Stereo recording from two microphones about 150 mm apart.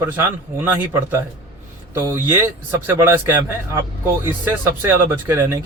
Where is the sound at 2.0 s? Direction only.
15° right (ahead or behind).